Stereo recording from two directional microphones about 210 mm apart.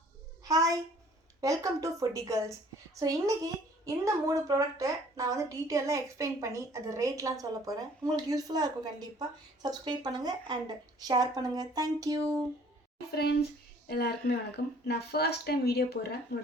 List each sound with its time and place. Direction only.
0.4 s a sound: 15° right (ahead or behind)
1.4 s a woman's voice: 15° right (ahead or behind)
13.8 s speech: 50° left (ahead or behind)